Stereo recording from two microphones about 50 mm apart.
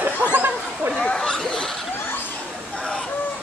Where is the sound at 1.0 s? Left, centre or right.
Centre.